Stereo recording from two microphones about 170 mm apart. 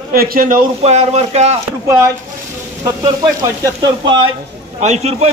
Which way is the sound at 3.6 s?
30° right (ahead or behind).